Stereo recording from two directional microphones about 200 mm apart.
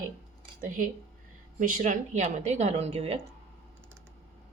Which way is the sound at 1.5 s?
40° right (ahead or behind).